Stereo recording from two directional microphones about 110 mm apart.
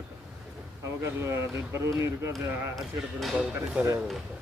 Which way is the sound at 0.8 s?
25° right (ahead or behind).